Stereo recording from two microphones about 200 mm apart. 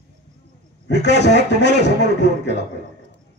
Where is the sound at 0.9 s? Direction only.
60° left (ahead or behind).